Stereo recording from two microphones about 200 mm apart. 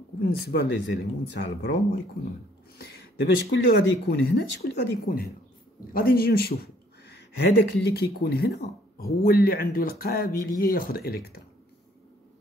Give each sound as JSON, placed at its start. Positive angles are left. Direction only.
{"t": 0.2, "sound": "speech", "side_deg": 55}
{"t": 2.8, "sound": "speech", "side_deg": 50}